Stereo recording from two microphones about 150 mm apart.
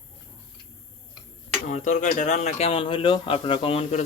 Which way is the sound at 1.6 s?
55° left (ahead or behind).